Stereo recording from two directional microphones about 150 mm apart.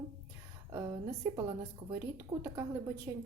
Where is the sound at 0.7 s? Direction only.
20° right (ahead or behind).